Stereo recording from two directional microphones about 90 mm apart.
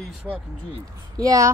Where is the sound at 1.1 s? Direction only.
40° right (ahead or behind).